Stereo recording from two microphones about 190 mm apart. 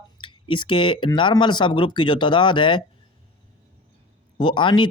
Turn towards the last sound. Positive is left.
turn(degrees=25)  # may be behind; listen again after turning